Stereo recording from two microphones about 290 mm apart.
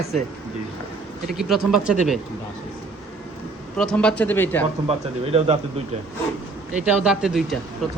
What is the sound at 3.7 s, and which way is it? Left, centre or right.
Speech, centre.